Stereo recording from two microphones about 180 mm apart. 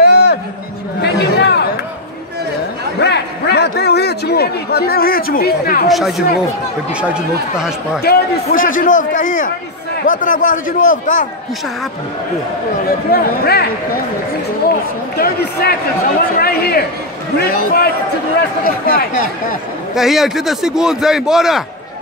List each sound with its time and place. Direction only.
0.0 s a sound: 65° left (ahead or behind)
3.0 s a sound: 70° left (ahead or behind); by 5.9 s 55° left (ahead or behind)
5.9 s a man's voice: centre (ahead or behind)
8.0 s a man's voice: 60° left (ahead or behind)
13.1 s speech: 60° left (ahead or behind)
15.1 s speech: 60° left (ahead or behind)
20.0 s a man's voice: centre (ahead or behind)